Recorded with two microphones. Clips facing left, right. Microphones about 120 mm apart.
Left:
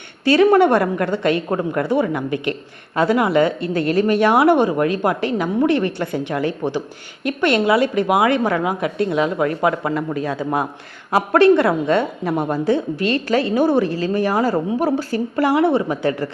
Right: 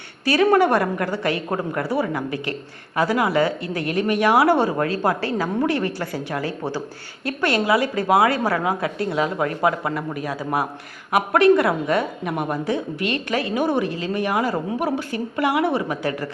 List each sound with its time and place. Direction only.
0.3 s a woman's voice: 25° left (ahead or behind)